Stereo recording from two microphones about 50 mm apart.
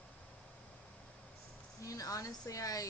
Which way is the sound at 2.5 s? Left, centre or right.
Left.